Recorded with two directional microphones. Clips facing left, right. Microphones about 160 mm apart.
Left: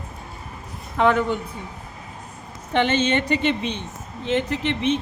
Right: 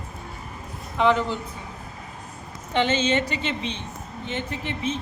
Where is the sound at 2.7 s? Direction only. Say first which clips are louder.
Left 2 dB; 55° left (ahead or behind).